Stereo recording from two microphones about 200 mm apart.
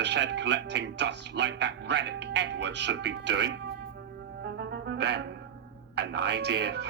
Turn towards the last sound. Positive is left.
turn(degrees=-55)  # may be behind; listen again after turning